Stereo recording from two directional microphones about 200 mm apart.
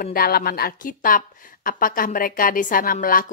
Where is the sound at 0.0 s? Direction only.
45° left (ahead or behind).